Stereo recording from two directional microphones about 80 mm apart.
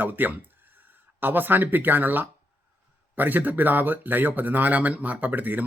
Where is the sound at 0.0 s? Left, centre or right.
Right.